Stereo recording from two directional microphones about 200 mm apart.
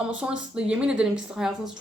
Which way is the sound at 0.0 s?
5° right (ahead or behind).